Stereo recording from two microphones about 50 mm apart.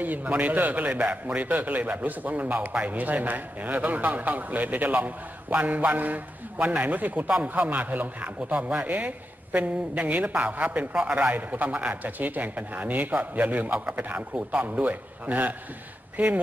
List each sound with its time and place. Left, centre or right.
0.0 s a man's voice: right